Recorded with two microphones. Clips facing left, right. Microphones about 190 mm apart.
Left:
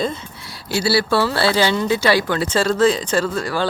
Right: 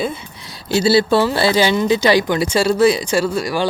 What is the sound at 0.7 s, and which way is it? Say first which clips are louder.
Speech: right 4 dB; 20° right (ahead or behind).